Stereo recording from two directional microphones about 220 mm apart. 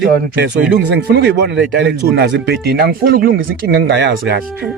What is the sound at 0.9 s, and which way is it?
Speech, 50° right (ahead or behind).